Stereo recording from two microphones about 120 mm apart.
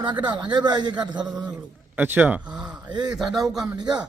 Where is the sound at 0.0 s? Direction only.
40° right (ahead or behind).